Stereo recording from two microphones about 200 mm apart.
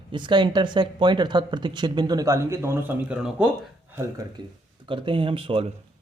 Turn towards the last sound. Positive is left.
turn(degrees=-25)  # may be behind; listen again after turning